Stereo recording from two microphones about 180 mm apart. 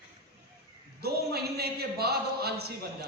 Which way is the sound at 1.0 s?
60° right (ahead or behind).